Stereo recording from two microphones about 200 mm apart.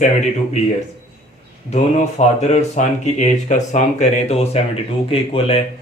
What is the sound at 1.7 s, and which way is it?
Speech, 35° left (ahead or behind).